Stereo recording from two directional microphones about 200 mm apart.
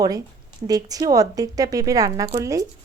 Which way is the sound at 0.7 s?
15° right (ahead or behind).